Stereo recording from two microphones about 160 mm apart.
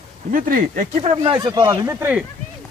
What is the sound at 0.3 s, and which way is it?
Speech, 60° right (ahead or behind).